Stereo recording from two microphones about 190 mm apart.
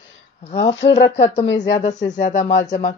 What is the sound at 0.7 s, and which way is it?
Speech, 65° left (ahead or behind).